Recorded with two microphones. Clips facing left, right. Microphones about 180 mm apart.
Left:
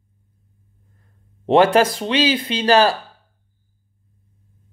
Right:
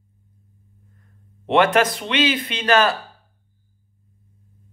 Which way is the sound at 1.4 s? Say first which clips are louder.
Left 3 dB; 35° left (ahead or behind).